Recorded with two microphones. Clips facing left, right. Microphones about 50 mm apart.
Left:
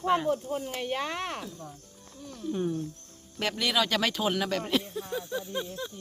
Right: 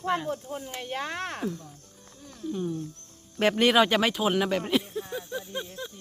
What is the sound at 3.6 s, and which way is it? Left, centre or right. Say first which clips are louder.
Speech: right 6 dB; right.